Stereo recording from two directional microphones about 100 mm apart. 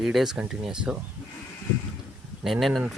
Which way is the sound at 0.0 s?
5° right (ahead or behind).